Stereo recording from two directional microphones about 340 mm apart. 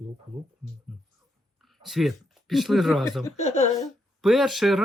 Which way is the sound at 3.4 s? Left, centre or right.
Centre.